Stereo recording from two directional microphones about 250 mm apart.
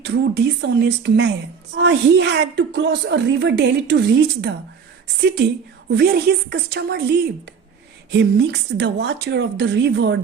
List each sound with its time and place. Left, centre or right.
0.0 s a woman's voice: right